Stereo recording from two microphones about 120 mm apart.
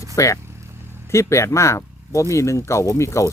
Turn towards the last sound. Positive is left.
turn(degrees=25)  # may be behind; listen again after turning